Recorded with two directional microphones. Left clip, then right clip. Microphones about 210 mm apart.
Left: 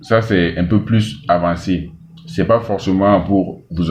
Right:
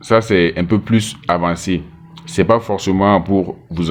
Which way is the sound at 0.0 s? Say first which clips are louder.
Right 2 dB; 45° right (ahead or behind).